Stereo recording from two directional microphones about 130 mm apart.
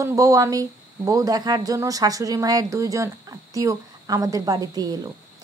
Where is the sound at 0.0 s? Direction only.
25° right (ahead or behind).